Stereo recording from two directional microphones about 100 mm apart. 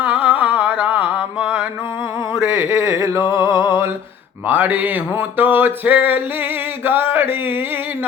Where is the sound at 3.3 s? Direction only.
30° right (ahead or behind).